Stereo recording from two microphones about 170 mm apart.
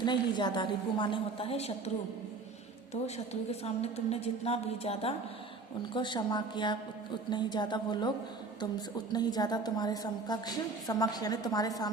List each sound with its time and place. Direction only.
0.0 s a woman's voice: 25° left (ahead or behind)
3.5 s a woman's voice: 40° left (ahead or behind)
9.1 s a woman's voice: 25° left (ahead or behind)